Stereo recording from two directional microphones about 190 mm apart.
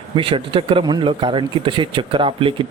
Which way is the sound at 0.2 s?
30° right (ahead or behind).